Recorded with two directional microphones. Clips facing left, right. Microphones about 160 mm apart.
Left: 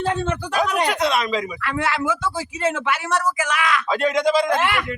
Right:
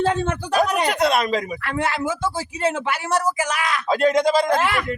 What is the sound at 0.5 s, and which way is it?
Speech, 45° right (ahead or behind).